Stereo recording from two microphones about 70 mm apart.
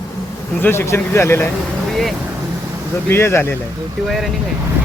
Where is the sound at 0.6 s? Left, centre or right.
Left.